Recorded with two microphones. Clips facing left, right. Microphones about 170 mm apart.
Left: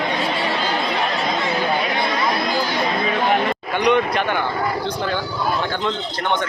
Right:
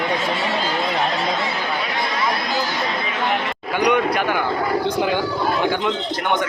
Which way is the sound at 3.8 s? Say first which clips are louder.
Even; 10° right (ahead or behind).